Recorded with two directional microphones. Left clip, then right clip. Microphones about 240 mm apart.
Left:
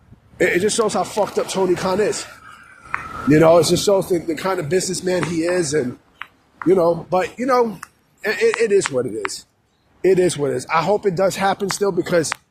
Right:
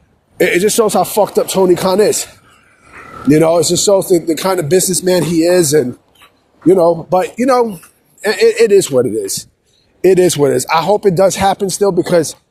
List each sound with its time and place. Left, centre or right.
0.3 s speech: right
3.2 s speech: right